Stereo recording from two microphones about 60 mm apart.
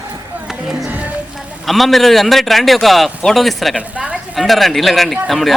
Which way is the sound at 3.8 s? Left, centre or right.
Right.